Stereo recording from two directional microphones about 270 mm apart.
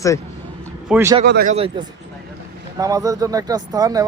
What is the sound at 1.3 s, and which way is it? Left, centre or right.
Speech, right.